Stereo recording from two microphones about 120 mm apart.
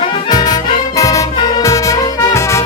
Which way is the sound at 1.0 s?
30° left (ahead or behind).